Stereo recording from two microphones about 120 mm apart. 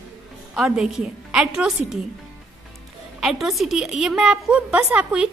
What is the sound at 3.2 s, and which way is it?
A woman's voice, centre (ahead or behind).